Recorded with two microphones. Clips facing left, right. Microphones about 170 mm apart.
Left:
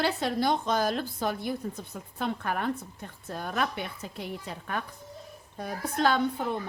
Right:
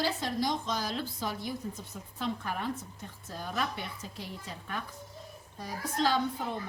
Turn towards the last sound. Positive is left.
turn(degrees=60)  # may be behind; listen again after turning